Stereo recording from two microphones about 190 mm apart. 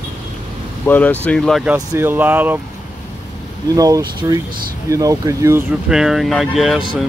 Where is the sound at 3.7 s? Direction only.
20° right (ahead or behind).